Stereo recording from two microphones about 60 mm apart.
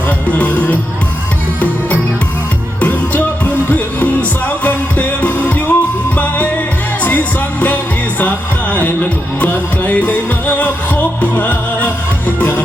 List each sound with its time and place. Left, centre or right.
0.3 s music: left
2.8 s music: left
8.7 s music: left
11.2 s music: left